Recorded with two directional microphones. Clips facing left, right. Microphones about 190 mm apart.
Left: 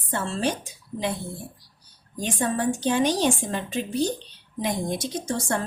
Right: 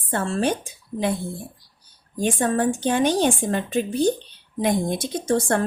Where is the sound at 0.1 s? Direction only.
55° right (ahead or behind).